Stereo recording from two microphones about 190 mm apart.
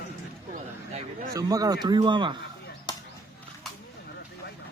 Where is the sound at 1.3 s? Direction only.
20° right (ahead or behind).